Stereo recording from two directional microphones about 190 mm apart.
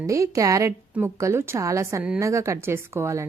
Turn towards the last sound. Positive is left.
turn(degrees=-15)  # may be behind; listen again after turning